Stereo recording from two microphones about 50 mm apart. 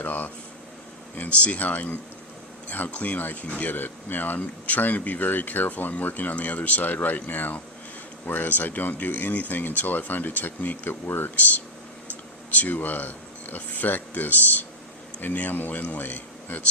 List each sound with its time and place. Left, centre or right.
0.0 s air conditioning: left
1.1 s speech: left